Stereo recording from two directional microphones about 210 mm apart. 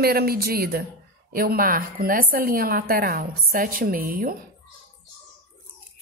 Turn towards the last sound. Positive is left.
turn(degrees=-45)  # may be behind; listen again after turning